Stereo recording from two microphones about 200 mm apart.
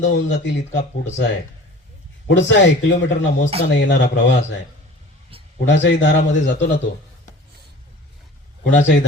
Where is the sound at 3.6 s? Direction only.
60° left (ahead or behind).